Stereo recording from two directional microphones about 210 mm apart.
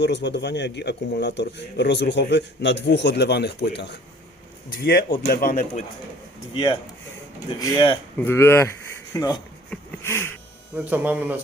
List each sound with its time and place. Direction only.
0.0 s a man's voice: 55° left (ahead or behind); by 5.8 s 40° left (ahead or behind)
7.6 s speech: 20° left (ahead or behind)
8.2 s speech: 10° left (ahead or behind)
9.6 s a sound: 10° left (ahead or behind)
10.8 s speech: 10° right (ahead or behind)